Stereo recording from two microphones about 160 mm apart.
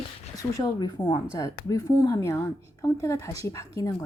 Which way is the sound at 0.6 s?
25° left (ahead or behind).